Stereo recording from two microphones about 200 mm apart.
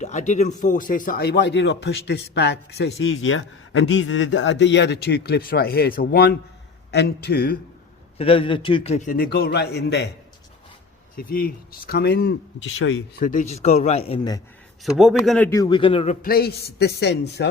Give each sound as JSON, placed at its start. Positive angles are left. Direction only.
{"t": 0.0, "sound": "a man's voice", "side_deg": 35}
{"t": 8.2, "sound": "a man's voice", "side_deg": 25}
{"t": 11.3, "sound": "speech", "side_deg": 45}
{"t": 13.1, "sound": "speech", "side_deg": 40}
{"t": 14.8, "sound": "a man's voice", "side_deg": 0}
{"t": 15.4, "sound": "speech", "side_deg": 20}
{"t": 16.2, "sound": "speech", "side_deg": 50}